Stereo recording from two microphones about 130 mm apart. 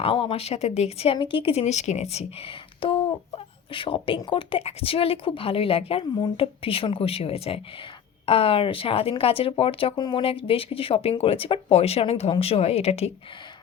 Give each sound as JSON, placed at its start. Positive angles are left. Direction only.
{"t": 0.0, "sound": "speech", "side_deg": 45}